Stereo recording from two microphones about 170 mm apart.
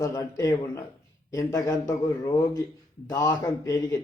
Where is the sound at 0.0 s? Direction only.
20° left (ahead or behind).